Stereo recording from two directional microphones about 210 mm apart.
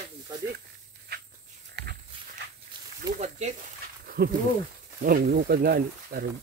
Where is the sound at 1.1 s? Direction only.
50° right (ahead or behind).